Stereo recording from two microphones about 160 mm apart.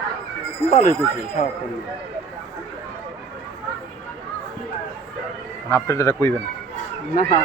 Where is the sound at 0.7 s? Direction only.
55° left (ahead or behind).